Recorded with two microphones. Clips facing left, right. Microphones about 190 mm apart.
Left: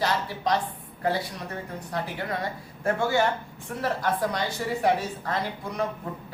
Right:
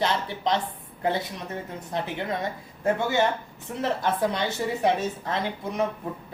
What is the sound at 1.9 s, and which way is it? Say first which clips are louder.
Speech: right 2 dB; 20° right (ahead or behind).